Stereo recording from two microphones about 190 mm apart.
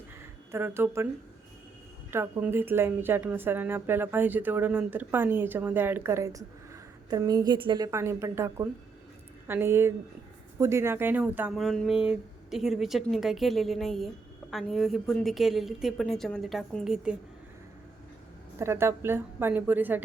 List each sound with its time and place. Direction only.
0.5 s a woman's voice: 10° right (ahead or behind)
2.0 s a woman's voice: 15° right (ahead or behind)
18.6 s a woman's voice: 15° right (ahead or behind)